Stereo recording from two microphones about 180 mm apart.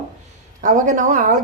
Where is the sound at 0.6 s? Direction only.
45° right (ahead or behind).